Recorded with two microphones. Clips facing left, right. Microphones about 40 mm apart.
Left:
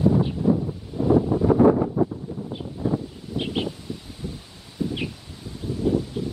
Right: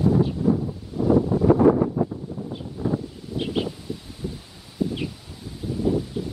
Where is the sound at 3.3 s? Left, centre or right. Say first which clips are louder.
Right 1 dB; centre.